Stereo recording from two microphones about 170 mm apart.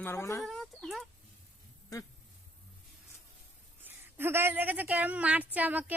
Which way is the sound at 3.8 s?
15° right (ahead or behind).